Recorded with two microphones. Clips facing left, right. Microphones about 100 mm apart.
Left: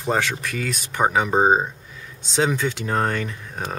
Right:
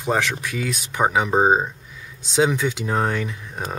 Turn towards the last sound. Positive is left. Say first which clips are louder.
# even
turn(degrees=0)  # may be behind; listen again after turning